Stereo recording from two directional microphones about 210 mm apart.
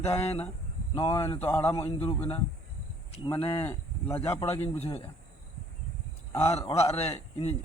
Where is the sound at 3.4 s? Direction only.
25° left (ahead or behind).